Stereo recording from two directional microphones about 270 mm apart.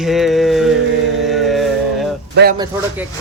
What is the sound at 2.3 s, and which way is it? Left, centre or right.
Speech, right.